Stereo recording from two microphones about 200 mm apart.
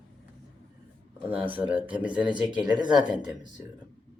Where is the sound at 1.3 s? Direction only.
25° right (ahead or behind).